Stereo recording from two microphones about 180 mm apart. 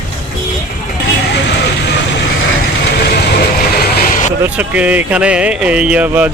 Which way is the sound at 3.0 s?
60° left (ahead or behind).